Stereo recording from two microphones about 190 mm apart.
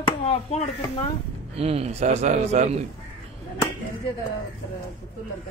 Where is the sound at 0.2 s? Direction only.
35° left (ahead or behind).